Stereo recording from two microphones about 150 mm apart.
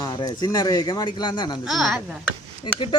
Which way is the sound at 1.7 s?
Centre (ahead or behind).